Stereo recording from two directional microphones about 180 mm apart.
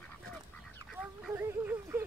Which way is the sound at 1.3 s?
15° right (ahead or behind).